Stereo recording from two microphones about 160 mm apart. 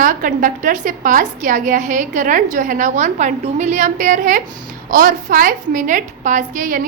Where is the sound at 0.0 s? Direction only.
55° right (ahead or behind).